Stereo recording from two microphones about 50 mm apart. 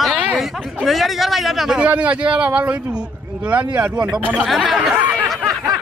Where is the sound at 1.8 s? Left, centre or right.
Right.